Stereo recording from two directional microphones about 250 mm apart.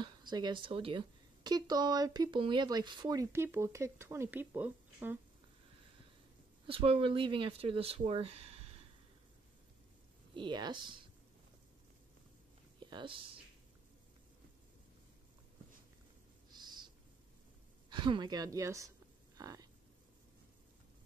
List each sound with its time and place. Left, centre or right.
0.0 s speech: centre
6.6 s speech: right
10.3 s speech: centre
12.9 s speech: centre
16.5 s owl: centre
17.8 s speech: centre
19.3 s a sound: centre